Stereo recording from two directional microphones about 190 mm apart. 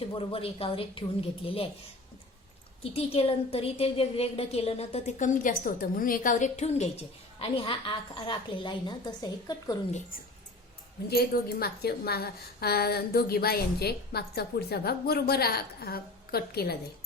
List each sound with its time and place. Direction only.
0.0 s a woman's voice: 30° left (ahead or behind)
2.9 s a woman's voice: 30° left (ahead or behind)
11.1 s a woman's voice: 55° left (ahead or behind)